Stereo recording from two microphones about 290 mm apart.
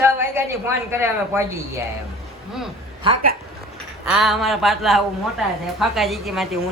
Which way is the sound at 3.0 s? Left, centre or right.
Right.